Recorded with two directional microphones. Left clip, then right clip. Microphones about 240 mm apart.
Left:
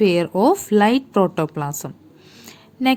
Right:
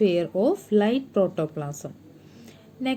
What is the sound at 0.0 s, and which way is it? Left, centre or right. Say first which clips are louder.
A woman's voice: left 5 dB; left.